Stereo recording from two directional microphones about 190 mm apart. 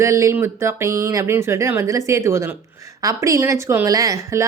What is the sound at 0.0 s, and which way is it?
Speech, 15° right (ahead or behind).